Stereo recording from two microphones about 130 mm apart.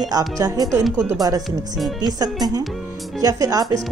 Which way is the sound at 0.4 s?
30° right (ahead or behind).